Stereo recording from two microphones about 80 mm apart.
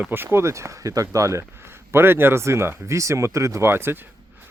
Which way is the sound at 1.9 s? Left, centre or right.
Right.